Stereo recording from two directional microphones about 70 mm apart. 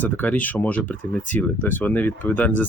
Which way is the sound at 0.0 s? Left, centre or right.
Left.